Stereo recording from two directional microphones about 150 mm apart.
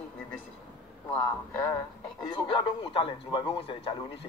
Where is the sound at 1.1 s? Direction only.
15° left (ahead or behind).